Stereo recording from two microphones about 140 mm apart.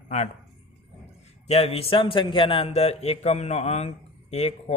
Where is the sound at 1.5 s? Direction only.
50° left (ahead or behind).